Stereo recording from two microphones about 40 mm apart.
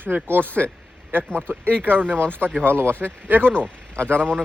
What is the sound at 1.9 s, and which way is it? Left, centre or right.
Speech, right.